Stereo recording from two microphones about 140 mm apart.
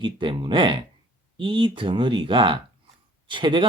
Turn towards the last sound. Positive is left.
turn(degrees=-35)  # may be behind; listen again after turning